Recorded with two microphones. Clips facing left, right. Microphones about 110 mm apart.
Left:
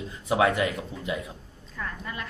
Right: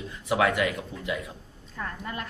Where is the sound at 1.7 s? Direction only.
40° right (ahead or behind).